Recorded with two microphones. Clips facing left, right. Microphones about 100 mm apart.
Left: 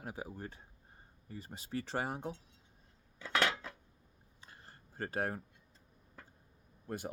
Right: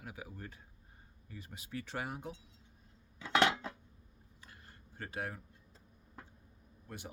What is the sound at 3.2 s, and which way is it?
Cutlery, 20° right (ahead or behind).